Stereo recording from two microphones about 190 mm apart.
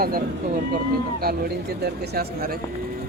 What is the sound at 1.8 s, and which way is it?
Speech, 55° right (ahead or behind).